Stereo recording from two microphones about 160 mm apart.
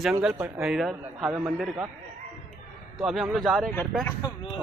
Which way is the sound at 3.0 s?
Centre (ahead or behind).